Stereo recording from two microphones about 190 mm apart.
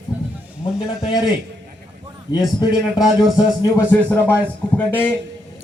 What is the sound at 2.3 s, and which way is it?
Speech, 20° left (ahead or behind).